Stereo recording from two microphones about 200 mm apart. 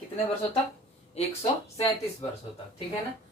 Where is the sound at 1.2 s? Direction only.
30° left (ahead or behind).